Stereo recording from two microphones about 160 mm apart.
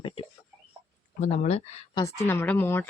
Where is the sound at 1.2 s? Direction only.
45° left (ahead or behind).